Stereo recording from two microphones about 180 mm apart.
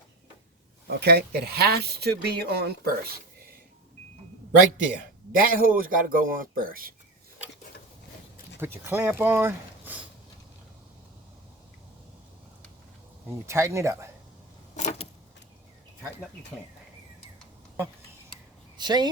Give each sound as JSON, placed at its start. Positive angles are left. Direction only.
{"t": 0.9, "sound": "speech", "side_deg": -60}
{"t": 5.3, "sound": "a man's voice", "side_deg": -50}
{"t": 8.5, "sound": "speech", "side_deg": -15}
{"t": 13.5, "sound": "speech", "side_deg": -15}
{"t": 14.8, "sound": "vehicle", "side_deg": 40}
{"t": 18.8, "sound": "speech", "side_deg": -25}